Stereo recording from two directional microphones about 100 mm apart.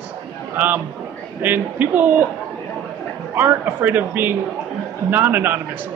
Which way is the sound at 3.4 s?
20° right (ahead or behind).